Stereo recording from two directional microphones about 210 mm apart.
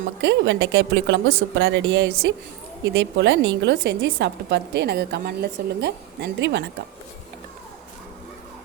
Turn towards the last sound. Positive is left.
turn(degrees=-55)  # may be behind; listen again after turning